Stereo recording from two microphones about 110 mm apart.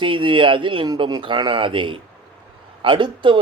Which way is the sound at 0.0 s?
50° right (ahead or behind).